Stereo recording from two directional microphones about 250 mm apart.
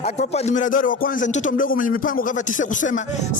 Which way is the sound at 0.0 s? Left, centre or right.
Left.